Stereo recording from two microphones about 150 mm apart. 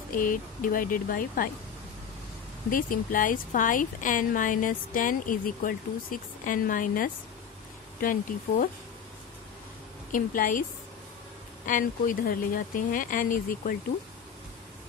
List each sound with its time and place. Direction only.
0.1 s speech: 65° left (ahead or behind)
2.7 s speech: 65° left (ahead or behind)
10.1 s speech: 65° left (ahead or behind)
11.6 s speech: 60° left (ahead or behind)